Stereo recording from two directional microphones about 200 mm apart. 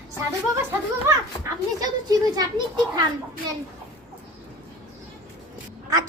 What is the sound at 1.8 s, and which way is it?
A child's voice, 20° right (ahead or behind).